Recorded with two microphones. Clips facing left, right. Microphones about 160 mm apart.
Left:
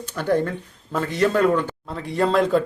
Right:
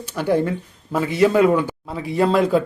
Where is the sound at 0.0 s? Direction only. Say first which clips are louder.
Right 2 dB; 10° right (ahead or behind).